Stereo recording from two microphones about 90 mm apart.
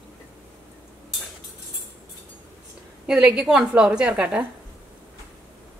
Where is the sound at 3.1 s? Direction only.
10° right (ahead or behind).